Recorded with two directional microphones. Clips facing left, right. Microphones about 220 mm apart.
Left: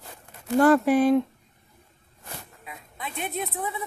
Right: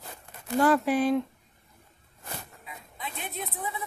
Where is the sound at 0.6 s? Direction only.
55° left (ahead or behind).